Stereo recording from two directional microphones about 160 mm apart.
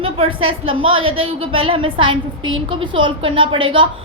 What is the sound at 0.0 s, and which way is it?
A woman's voice, 35° right (ahead or behind).